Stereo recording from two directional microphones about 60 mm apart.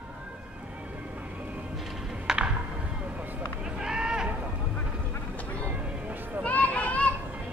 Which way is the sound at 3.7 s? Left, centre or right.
Centre.